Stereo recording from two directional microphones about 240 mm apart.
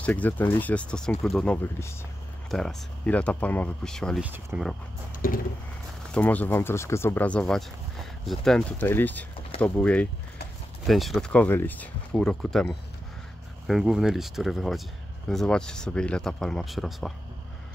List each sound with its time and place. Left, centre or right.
0.0 s speech: centre
5.2 s a sound: left
6.1 s speech: centre